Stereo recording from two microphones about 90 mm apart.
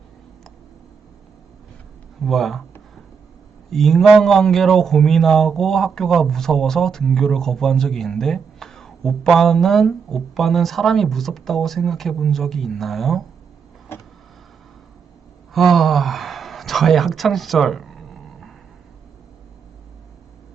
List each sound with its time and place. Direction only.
2.2 s speech: centre (ahead or behind)
3.7 s speech: 5° left (ahead or behind)
13.9 s vehicle: 25° left (ahead or behind)
15.5 s a sound: centre (ahead or behind)